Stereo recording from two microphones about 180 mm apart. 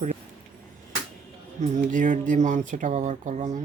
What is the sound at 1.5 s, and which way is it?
Speech, 40° right (ahead or behind).